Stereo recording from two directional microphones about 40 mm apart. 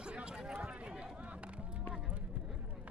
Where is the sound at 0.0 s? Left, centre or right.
Right.